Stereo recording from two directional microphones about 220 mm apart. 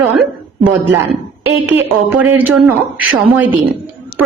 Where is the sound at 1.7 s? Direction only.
10° right (ahead or behind).